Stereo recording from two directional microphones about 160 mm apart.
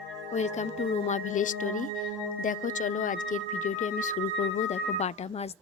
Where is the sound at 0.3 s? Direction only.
45° left (ahead or behind).